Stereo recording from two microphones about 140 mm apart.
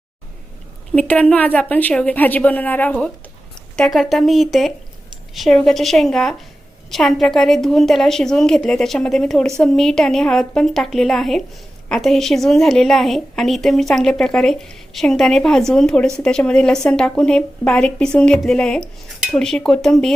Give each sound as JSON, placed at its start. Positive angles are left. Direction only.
{"t": 0.9, "sound": "a woman's voice", "side_deg": 10}